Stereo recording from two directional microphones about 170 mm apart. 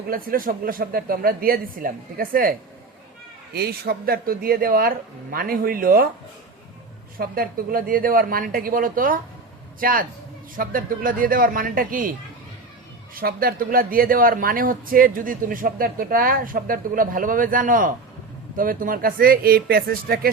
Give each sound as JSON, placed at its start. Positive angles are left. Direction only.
{"t": 0.1, "sound": "a man's voice", "side_deg": -55}
{"t": 3.5, "sound": "a man's voice", "side_deg": -70}
{"t": 7.2, "sound": "a man's voice", "side_deg": -60}
{"t": 13.1, "sound": "a man's voice", "side_deg": -60}